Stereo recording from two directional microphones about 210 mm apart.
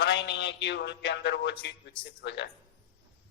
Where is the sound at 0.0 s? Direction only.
55° left (ahead or behind).